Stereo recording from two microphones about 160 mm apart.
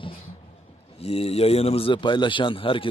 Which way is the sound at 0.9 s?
40° left (ahead or behind).